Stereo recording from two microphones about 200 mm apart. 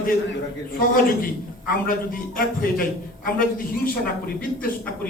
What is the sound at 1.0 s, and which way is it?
A man's voice, 45° left (ahead or behind).